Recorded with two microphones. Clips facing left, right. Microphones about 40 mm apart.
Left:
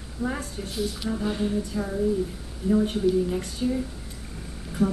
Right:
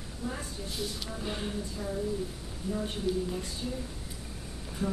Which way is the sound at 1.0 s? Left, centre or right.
Left.